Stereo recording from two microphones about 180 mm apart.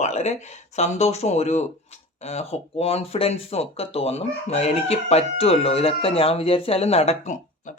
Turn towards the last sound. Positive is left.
turn(degrees=35)  # may be behind; listen again after turning